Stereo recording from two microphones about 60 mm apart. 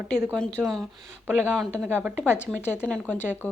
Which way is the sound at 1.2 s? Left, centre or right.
Right.